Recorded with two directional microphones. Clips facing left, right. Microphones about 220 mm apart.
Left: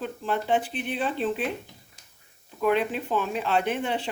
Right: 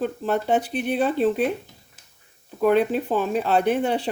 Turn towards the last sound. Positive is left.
turn(degrees=-40)  # may be behind; listen again after turning